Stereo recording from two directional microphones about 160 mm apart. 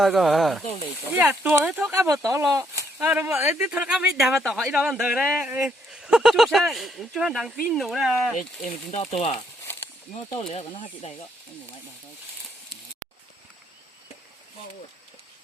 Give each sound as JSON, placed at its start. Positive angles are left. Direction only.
{"t": 0.0, "sound": "speech", "side_deg": 0}
{"t": 2.0, "sound": "speech", "side_deg": -20}
{"t": 8.4, "sound": "speech", "side_deg": 45}
{"t": 9.6, "sound": "a sound", "side_deg": 15}
{"t": 10.3, "sound": "speech", "side_deg": 40}